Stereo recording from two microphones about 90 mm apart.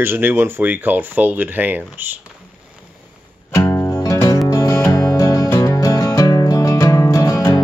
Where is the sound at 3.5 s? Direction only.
30° left (ahead or behind).